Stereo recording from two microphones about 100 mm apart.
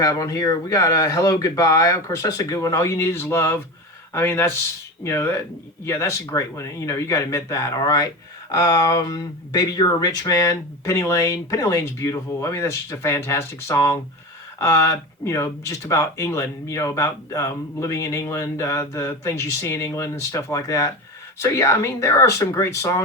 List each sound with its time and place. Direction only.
0.0 s speech: 35° left (ahead or behind)